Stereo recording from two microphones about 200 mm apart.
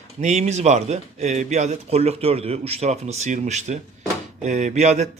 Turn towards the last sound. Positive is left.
turn(degrees=-35)  # may be behind; listen again after turning